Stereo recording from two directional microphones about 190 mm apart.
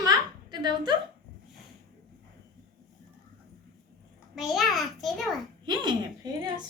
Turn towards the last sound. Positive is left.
turn(degrees=-25)  # may be behind; listen again after turning